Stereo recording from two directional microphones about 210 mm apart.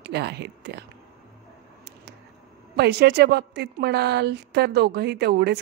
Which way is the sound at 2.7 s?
50° right (ahead or behind).